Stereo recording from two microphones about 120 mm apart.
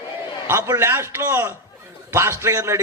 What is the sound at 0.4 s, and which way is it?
A man's voice, 20° right (ahead or behind).